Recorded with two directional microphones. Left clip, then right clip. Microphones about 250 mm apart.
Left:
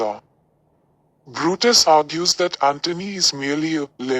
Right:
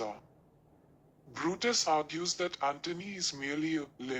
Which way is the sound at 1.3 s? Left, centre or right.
Left.